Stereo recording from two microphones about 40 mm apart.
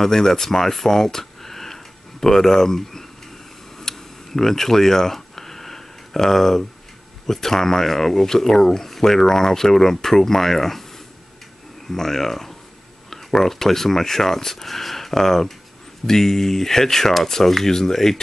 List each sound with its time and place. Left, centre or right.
0.0 s speech: centre
3.8 s tick: centre
7.2 s speech: centre
11.9 s speech: centre